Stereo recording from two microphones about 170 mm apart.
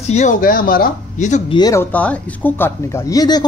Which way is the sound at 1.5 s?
20° left (ahead or behind).